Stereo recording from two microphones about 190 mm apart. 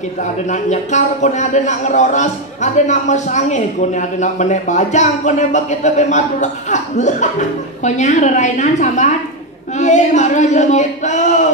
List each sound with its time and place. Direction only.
0.5 s a man's voice: 40° left (ahead or behind)